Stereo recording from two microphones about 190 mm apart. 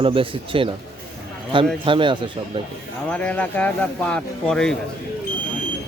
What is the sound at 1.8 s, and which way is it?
Speech, 25° right (ahead or behind).